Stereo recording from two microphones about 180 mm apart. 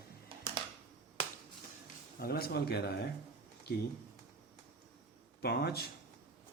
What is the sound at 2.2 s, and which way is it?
Speech, 60° left (ahead or behind).